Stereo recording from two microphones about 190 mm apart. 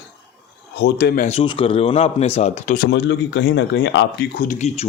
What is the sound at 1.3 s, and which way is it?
Speech, 30° left (ahead or behind).